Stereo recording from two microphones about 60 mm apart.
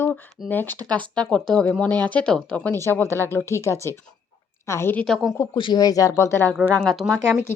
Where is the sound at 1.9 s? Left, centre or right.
Left.